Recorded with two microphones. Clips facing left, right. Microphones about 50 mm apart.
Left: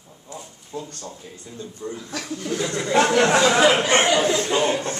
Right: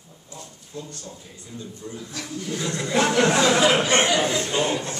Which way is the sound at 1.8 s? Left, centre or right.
Left.